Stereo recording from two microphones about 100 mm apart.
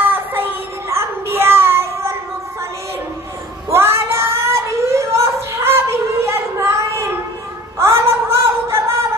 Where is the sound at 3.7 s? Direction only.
25° right (ahead or behind).